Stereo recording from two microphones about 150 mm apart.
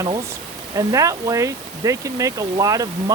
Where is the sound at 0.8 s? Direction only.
25° right (ahead or behind).